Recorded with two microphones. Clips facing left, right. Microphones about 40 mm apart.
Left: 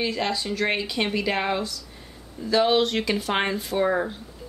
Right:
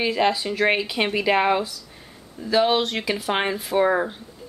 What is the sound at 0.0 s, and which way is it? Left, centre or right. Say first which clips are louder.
Speech: right 5 dB; centre.